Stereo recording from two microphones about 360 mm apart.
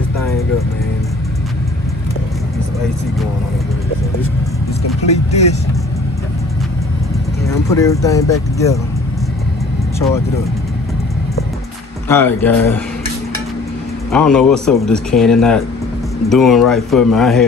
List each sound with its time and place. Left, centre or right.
5.0 s speech: centre
7.4 s speech: centre
9.9 s speech: centre
12.1 s speech: centre
14.1 s speech: centre